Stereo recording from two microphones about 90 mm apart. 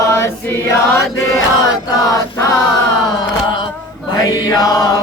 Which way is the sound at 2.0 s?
35° left (ahead or behind).